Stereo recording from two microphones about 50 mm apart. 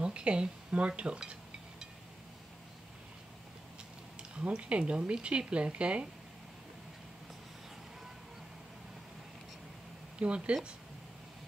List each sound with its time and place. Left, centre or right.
0.0 s speech: right
4.2 s speech: right
10.1 s speech: right